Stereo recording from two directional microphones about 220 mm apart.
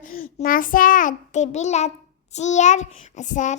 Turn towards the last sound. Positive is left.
turn(degrees=35)  # may be behind; listen again after turning